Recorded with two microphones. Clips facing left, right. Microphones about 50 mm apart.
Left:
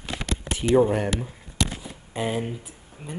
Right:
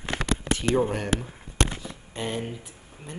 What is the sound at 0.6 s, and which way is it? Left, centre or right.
Speech, centre.